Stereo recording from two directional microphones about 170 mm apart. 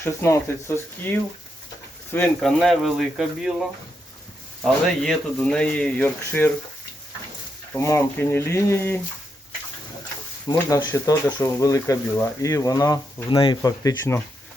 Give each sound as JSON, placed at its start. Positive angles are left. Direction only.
{"t": 0.0, "sound": "speech", "side_deg": 15}
{"t": 7.7, "sound": "speech", "side_deg": 15}
{"t": 10.5, "sound": "speech", "side_deg": 20}